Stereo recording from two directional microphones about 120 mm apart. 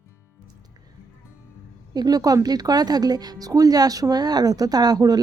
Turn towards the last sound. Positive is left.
turn(degrees=-30)  # may be behind; listen again after turning